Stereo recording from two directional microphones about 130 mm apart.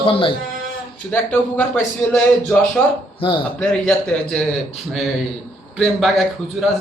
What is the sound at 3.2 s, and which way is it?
Speech, 45° left (ahead or behind).